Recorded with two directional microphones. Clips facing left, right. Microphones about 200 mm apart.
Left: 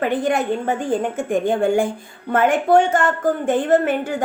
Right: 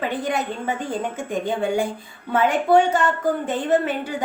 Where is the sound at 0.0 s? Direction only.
50° left (ahead or behind).